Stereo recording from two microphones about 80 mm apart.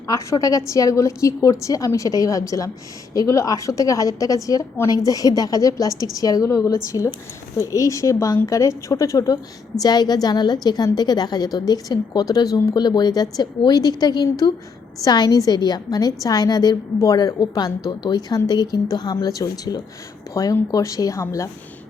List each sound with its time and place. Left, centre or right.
0.1 s a woman's voice: left
6.9 s speech: left
7.5 s a woman's voice: left